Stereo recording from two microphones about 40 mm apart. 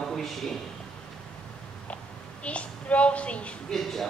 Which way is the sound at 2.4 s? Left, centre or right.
Left.